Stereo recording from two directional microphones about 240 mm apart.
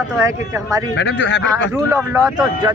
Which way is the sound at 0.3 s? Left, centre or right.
Centre.